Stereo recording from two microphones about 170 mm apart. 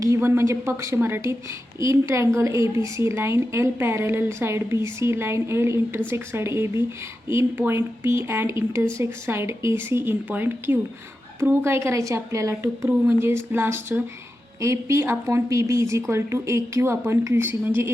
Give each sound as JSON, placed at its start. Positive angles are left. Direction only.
{"t": 0.0, "sound": "a woman's voice", "side_deg": -15}